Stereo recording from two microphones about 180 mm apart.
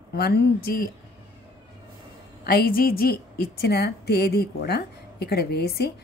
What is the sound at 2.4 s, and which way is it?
A woman's voice, 55° left (ahead or behind).